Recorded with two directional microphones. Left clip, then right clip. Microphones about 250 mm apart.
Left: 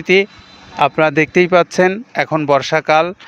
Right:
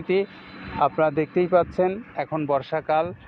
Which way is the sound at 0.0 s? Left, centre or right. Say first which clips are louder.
Left 11 dB; left.